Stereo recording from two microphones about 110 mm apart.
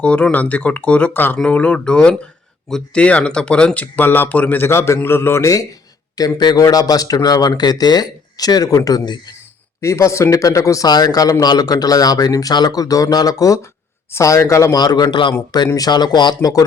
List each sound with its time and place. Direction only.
0.0 s speech: 10° left (ahead or behind); by 9.3 s 35° left (ahead or behind)
9.8 s speech: 25° left (ahead or behind)